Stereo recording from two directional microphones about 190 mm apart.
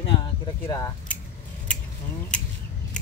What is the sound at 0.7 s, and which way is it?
Speech, 20° left (ahead or behind).